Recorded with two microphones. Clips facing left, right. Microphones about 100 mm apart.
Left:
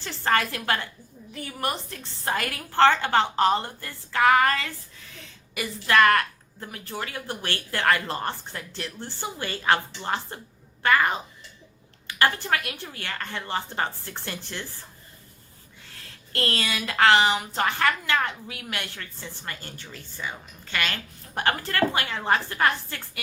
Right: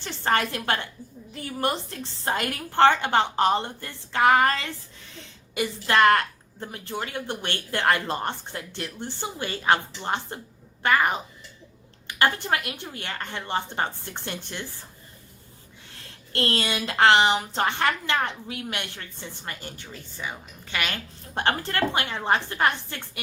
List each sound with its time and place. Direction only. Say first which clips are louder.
0.0 s a woman's voice: even; 20° right (ahead or behind)
16.3 s a woman's voice: right 2 dB; 30° right (ahead or behind)